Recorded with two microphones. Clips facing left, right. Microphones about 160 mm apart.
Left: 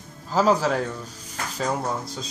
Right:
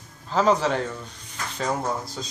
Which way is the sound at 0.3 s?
5° left (ahead or behind).